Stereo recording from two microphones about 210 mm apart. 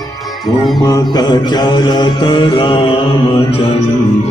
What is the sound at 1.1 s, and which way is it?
Mantra, 20° left (ahead or behind).